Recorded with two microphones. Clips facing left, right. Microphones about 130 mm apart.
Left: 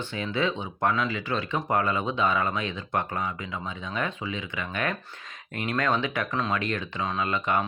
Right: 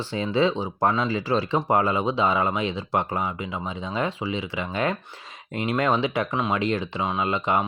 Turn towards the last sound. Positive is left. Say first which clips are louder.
# right 3 dB
turn(degrees=-25)  # may be behind; listen again after turning